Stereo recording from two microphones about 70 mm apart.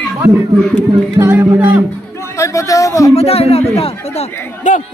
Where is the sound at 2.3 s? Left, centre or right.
Left.